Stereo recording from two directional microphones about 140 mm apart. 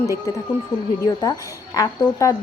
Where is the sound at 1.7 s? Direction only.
25° left (ahead or behind).